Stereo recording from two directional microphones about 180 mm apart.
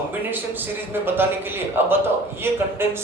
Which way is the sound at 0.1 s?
10° right (ahead or behind).